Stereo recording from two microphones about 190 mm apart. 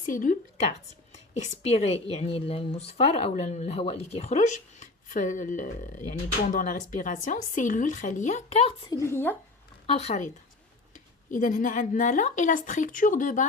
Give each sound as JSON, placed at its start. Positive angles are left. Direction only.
{"t": 0.0, "sound": "speech", "side_deg": 45}
{"t": 8.9, "sound": "a woman's voice", "side_deg": 15}
{"t": 9.8, "sound": "speech", "side_deg": 30}